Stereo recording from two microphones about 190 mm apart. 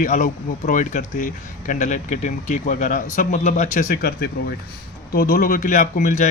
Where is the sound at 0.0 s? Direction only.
45° left (ahead or behind).